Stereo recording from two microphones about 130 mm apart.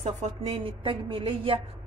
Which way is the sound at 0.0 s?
55° right (ahead or behind).